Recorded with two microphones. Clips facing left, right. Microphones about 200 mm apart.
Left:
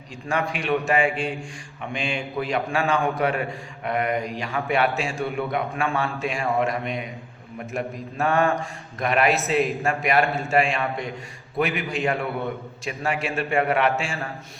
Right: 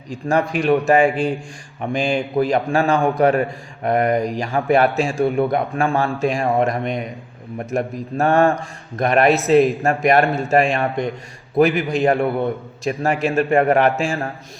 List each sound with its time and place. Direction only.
0.1 s a man's voice: 40° right (ahead or behind)